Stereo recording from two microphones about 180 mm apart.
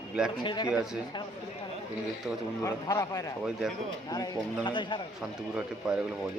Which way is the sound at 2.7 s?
20° left (ahead or behind).